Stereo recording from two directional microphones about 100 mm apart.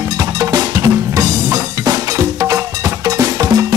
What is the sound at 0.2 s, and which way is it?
Music, 40° right (ahead or behind).